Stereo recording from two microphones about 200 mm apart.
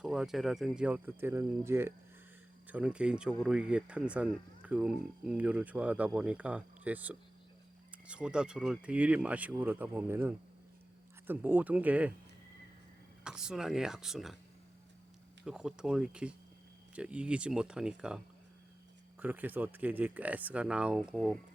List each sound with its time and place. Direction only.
0.0 s speech: centre (ahead or behind)
13.2 s speech: 5° right (ahead or behind)
15.4 s speech: 5° right (ahead or behind)
19.2 s speech: 10° right (ahead or behind)